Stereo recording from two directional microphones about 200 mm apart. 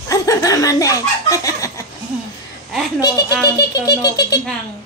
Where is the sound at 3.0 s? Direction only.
20° left (ahead or behind).